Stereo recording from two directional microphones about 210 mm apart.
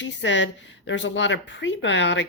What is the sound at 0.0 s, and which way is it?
A woman's voice, 60° left (ahead or behind).